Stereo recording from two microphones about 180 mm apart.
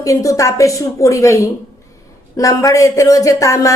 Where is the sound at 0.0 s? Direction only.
20° left (ahead or behind).